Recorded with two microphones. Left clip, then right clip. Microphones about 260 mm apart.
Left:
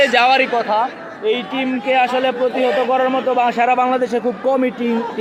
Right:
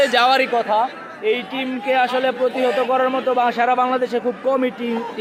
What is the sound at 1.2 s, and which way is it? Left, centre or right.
A man's voice, centre.